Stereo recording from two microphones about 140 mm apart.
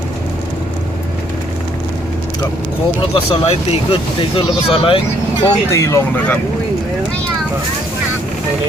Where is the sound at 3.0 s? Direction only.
40° left (ahead or behind).